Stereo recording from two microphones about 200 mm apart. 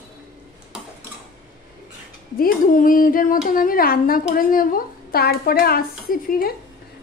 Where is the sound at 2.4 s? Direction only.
45° left (ahead or behind).